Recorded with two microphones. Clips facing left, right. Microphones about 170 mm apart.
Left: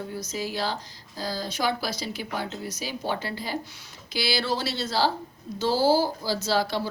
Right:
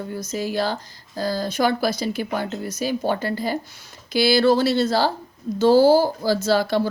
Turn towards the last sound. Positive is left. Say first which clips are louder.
# right 6 dB
turn(degrees=-50)  # may be behind; listen again after turning